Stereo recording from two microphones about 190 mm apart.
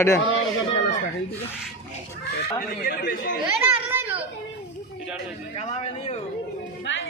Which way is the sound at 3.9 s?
10° right (ahead or behind).